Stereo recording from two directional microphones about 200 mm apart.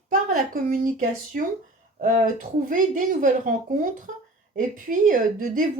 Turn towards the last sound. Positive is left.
turn(degrees=-40)  # may be behind; listen again after turning